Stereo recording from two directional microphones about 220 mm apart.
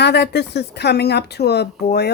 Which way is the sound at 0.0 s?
50° left (ahead or behind).